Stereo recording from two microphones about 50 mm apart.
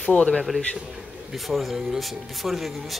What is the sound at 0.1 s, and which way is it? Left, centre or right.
Speech, centre.